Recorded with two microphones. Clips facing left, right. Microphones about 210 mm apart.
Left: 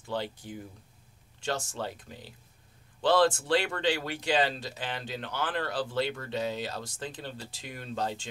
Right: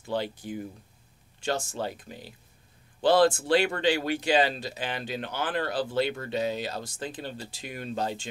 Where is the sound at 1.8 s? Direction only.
10° right (ahead or behind).